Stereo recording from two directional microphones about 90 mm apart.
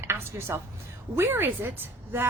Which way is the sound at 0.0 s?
25° right (ahead or behind).